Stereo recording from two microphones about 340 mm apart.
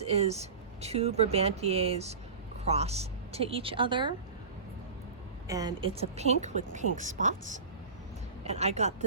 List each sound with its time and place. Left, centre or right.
0.0 s speech: centre
5.5 s speech: centre